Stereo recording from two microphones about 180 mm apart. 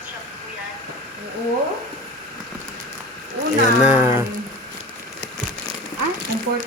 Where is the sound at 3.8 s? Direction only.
10° right (ahead or behind).